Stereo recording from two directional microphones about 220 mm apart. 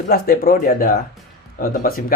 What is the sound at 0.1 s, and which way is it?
Speech, 40° left (ahead or behind).